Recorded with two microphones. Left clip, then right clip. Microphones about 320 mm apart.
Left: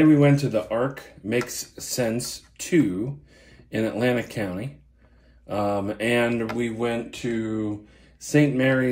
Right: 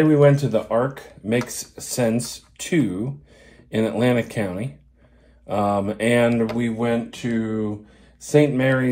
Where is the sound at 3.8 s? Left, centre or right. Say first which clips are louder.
Right 3 dB; centre.